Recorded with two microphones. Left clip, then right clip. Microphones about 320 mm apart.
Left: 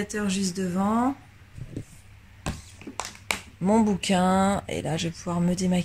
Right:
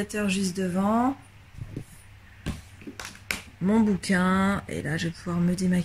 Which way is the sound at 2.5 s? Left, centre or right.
Centre.